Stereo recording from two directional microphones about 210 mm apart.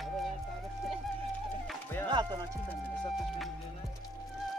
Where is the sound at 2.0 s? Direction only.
20° right (ahead or behind).